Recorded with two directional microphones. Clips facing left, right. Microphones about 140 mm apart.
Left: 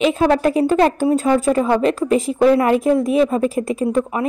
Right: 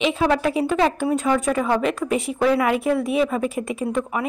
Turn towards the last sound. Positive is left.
turn(degrees=35)  # may be behind; listen again after turning